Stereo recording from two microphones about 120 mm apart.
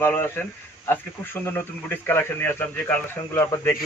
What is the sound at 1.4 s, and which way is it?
Speech, 20° left (ahead or behind).